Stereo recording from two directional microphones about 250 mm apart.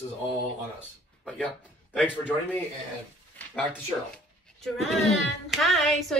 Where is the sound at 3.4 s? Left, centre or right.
Centre.